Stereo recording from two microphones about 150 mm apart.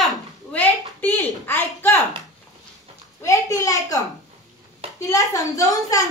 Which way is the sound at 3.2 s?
20° left (ahead or behind).